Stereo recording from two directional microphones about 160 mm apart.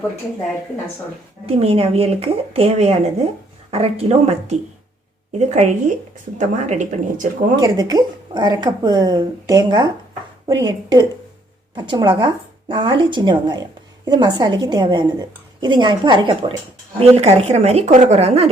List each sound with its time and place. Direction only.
1.5 s a woman's voice: 40° right (ahead or behind)
7.5 s a woman's voice: 25° right (ahead or behind)
17.0 s a woman's voice: 40° right (ahead or behind)